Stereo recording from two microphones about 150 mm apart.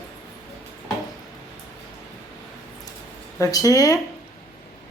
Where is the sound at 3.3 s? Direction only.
20° left (ahead or behind).